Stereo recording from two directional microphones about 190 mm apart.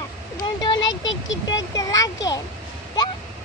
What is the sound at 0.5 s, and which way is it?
Speech, 20° left (ahead or behind).